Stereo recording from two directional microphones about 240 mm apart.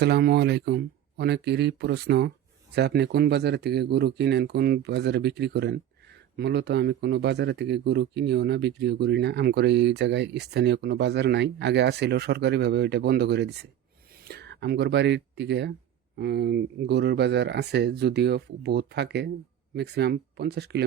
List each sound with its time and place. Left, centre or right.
0.0 s speech: right